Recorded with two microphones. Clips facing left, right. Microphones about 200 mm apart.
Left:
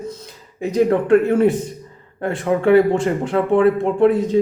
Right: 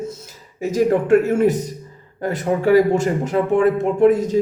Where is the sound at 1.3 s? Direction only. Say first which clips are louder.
Left 1 dB; 40° right (ahead or behind).